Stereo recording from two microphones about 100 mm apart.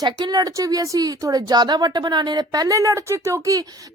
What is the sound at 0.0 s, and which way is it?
Speech, 45° right (ahead or behind).